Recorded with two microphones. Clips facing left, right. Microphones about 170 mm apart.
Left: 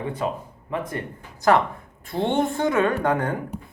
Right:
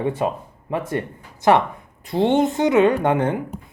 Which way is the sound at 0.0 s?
25° right (ahead or behind).